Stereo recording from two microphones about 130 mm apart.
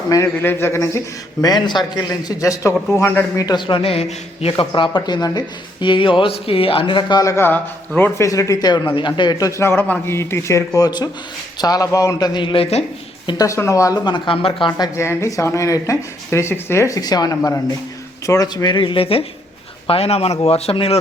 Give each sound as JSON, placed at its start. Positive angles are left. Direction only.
{"t": 0.1, "sound": "a woman's voice", "side_deg": 20}
{"t": 3.4, "sound": "speech", "side_deg": 35}
{"t": 8.3, "sound": "a woman's voice", "side_deg": 25}